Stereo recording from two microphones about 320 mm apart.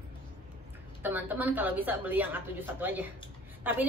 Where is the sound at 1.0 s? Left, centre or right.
Centre.